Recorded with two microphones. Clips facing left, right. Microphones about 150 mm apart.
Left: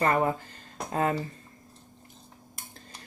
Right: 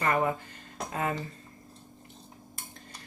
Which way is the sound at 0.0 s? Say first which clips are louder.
Left 2 dB; 35° left (ahead or behind).